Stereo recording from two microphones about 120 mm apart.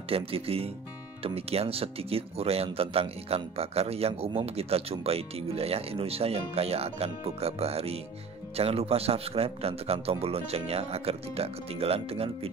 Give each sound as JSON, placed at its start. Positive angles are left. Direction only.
{"t": 0.1, "sound": "speech", "side_deg": -55}